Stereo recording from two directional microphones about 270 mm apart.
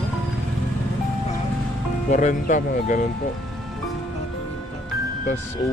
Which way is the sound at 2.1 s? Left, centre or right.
Left.